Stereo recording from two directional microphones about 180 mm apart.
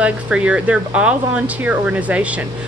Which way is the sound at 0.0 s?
5° right (ahead or behind).